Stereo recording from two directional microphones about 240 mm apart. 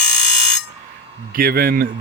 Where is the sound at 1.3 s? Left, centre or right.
Right.